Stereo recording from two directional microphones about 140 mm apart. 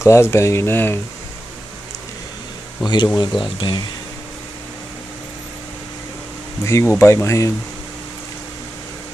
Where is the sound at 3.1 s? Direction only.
35° left (ahead or behind).